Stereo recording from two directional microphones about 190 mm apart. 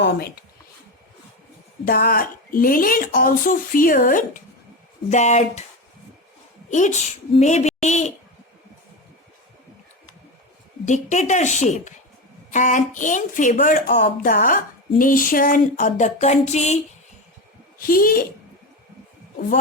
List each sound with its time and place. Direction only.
0.0 s speech: 60° left (ahead or behind)
1.8 s a woman's voice: 50° left (ahead or behind)
6.7 s a woman's voice: 40° left (ahead or behind)
10.8 s a woman's voice: 40° left (ahead or behind)
17.7 s speech: 50° left (ahead or behind)